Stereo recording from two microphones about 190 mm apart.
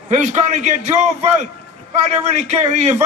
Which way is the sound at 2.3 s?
40° right (ahead or behind).